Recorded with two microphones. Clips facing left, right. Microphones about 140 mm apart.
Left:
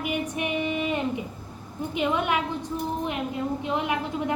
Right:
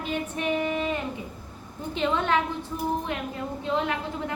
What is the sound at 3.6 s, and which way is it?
Speech, 15° left (ahead or behind).